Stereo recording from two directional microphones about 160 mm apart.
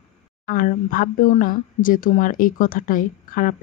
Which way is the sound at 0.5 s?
55° left (ahead or behind).